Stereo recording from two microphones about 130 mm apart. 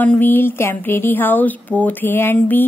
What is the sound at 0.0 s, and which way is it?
A woman's voice, 15° left (ahead or behind).